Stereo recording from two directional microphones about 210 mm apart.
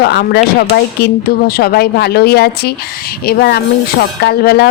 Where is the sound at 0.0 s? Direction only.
55° left (ahead or behind).